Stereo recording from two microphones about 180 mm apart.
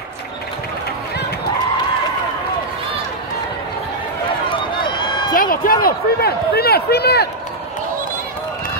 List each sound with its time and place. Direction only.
4.5 s run: 25° left (ahead or behind)
5.3 s a sound: 50° left (ahead or behind)
5.9 s speech: 60° left (ahead or behind)